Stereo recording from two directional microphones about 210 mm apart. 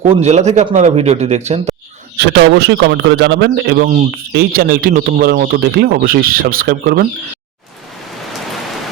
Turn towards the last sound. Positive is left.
turn(degrees=-45)  # may be behind; listen again after turning